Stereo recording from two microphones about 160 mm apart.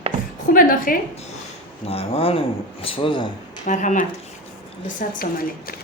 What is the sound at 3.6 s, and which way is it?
Speech, 50° left (ahead or behind).